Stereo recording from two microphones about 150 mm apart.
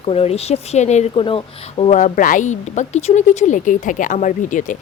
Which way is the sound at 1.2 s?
35° left (ahead or behind).